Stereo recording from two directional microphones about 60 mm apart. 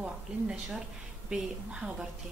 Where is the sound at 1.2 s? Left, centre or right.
Centre.